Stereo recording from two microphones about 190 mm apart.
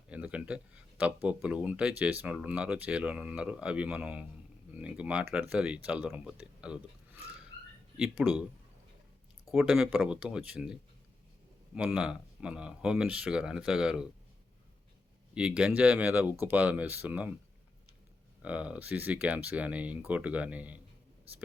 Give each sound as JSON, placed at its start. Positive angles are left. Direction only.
{"t": 0.1, "sound": "speech", "side_deg": -5}
{"t": 7.9, "sound": "speech", "side_deg": -5}
{"t": 9.5, "sound": "speech", "side_deg": 0}
{"t": 11.8, "sound": "speech", "side_deg": -5}
{"t": 15.4, "sound": "speech", "side_deg": -5}
{"t": 18.4, "sound": "speech", "side_deg": -5}